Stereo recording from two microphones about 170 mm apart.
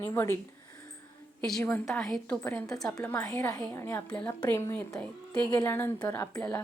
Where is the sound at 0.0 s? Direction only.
15° left (ahead or behind).